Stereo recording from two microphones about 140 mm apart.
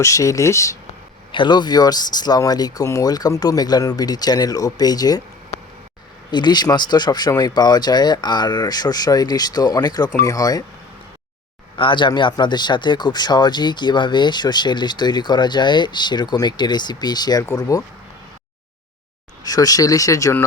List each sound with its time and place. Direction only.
0.0 s speech: 25° left (ahead or behind)
1.3 s speech: 35° left (ahead or behind)
6.3 s speech: 30° left (ahead or behind)
11.8 s speech: 35° left (ahead or behind)
19.4 s speech: 25° left (ahead or behind)